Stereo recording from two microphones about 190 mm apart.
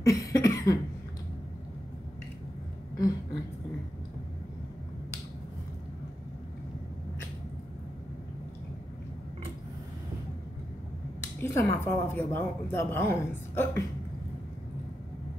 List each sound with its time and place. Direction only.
0.0 s cough: 15° left (ahead or behind)
11.4 s a woman's voice: 15° left (ahead or behind)